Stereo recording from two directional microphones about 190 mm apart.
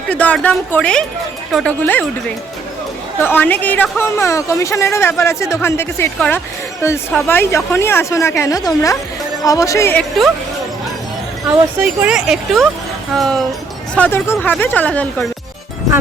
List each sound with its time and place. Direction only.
0.1 s speech: 5° left (ahead or behind)
3.2 s speech: 10° left (ahead or behind)
11.8 s speech: 5° right (ahead or behind)